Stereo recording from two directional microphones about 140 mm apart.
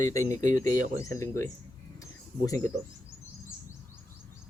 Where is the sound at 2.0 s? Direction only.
25° left (ahead or behind).